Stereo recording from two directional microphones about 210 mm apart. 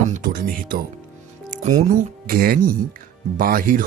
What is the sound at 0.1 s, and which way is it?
Speech, 40° right (ahead or behind).